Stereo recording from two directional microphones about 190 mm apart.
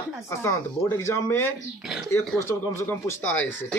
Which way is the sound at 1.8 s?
Centre (ahead or behind).